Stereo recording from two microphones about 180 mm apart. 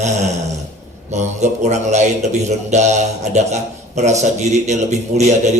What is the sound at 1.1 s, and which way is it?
A man's voice, 40° right (ahead or behind).